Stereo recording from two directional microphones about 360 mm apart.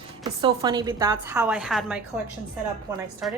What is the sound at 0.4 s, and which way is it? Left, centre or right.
A woman's voice, centre.